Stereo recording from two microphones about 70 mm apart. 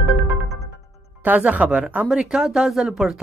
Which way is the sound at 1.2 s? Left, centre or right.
Right.